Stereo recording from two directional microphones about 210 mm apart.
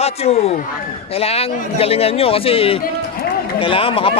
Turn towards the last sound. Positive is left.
turn(degrees=25)  # may be behind; listen again after turning